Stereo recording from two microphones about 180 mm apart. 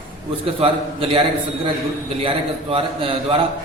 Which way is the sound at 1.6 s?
30° right (ahead or behind).